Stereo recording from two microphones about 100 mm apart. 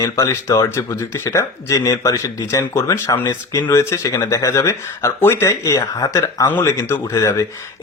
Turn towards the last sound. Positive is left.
turn(degrees=30)  # may be behind; listen again after turning